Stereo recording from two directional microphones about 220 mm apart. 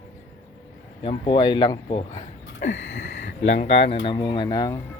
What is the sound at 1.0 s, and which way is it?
Speech, 20° left (ahead or behind).